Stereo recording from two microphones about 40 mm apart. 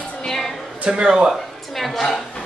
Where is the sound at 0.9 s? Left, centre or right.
Right.